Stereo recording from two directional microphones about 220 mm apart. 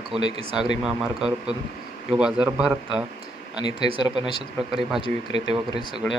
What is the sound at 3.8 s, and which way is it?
Speech, 25° right (ahead or behind).